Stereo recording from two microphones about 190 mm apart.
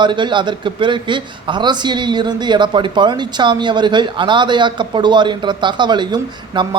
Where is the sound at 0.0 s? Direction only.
25° right (ahead or behind).